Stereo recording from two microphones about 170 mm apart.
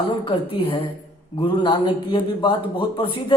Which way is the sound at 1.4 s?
30° left (ahead or behind).